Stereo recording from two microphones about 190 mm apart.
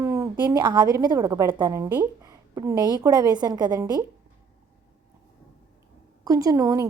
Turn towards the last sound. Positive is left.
turn(degrees=-15)  # may be behind; listen again after turning